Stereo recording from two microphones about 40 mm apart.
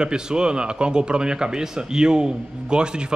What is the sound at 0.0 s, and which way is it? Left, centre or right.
Speech, right.